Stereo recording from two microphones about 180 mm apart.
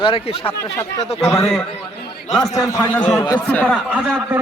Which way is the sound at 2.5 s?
15° left (ahead or behind).